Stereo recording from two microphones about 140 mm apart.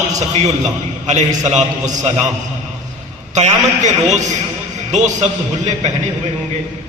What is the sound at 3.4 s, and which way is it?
Speech, 55° right (ahead or behind).